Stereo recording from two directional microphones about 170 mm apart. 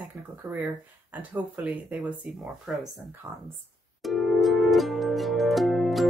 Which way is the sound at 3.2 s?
15° right (ahead or behind).